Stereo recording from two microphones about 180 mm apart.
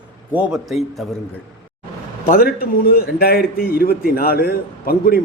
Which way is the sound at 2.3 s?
55° left (ahead or behind).